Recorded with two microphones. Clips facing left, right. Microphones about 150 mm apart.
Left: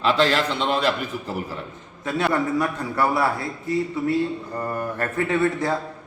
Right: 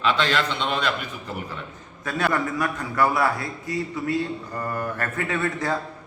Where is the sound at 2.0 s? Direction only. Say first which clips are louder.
Left 2 dB; 20° left (ahead or behind).